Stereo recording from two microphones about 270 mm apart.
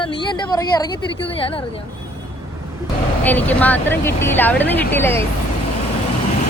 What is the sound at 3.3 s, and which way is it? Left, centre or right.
Speech, centre.